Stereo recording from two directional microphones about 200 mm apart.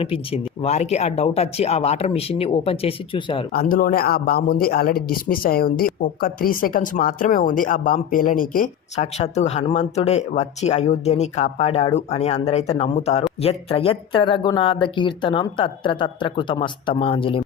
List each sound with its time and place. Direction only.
0.0 s speech: 30° left (ahead or behind)
3.5 s speech: 45° left (ahead or behind); by 17.4 s 25° left (ahead or behind)